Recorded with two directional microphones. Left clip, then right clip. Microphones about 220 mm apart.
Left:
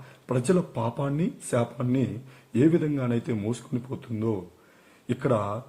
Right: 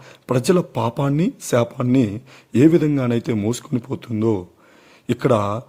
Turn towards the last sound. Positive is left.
turn(degrees=-45)  # may be behind; listen again after turning